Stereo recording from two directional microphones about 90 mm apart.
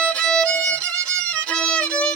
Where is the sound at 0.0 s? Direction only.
10° left (ahead or behind).